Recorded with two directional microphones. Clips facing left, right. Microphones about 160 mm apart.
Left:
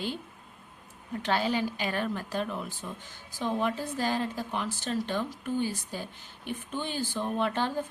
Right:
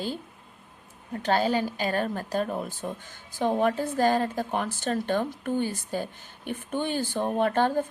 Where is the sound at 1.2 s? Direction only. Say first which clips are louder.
Right 4 dB; 40° right (ahead or behind).